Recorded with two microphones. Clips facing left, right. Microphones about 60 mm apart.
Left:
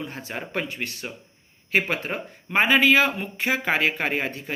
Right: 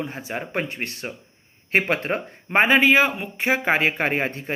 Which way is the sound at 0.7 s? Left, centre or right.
Right.